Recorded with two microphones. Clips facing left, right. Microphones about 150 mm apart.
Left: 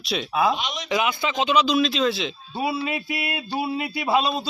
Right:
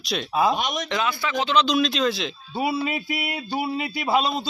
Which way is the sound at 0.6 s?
45° right (ahead or behind).